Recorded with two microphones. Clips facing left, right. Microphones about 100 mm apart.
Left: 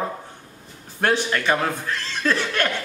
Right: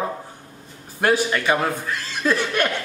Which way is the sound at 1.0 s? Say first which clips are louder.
Right 2 dB; 10° right (ahead or behind).